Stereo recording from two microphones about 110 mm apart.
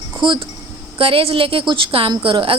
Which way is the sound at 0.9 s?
60° right (ahead or behind).